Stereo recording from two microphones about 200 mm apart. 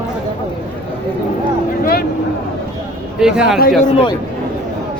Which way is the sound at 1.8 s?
50° left (ahead or behind).